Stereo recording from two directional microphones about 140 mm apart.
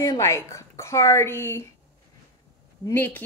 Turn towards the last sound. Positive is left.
turn(degrees=15)  # may be behind; listen again after turning